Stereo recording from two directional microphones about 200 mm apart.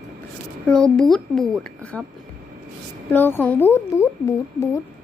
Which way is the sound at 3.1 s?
10° left (ahead or behind).